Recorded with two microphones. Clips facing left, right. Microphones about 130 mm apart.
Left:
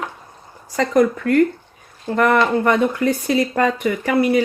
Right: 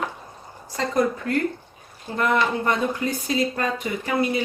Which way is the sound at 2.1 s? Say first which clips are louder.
Left 6 dB; 75° left (ahead or behind).